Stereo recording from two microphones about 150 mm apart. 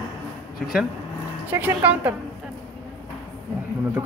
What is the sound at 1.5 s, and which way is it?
Speech, 10° right (ahead or behind).